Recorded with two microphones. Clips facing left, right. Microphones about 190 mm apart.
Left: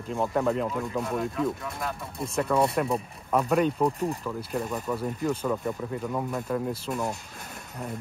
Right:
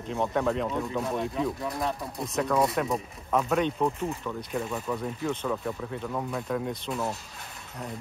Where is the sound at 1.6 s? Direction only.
25° right (ahead or behind).